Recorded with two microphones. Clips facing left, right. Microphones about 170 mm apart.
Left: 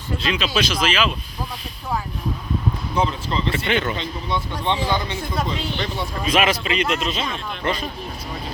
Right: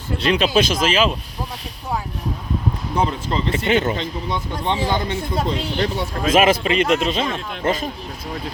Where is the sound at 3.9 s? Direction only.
45° right (ahead or behind).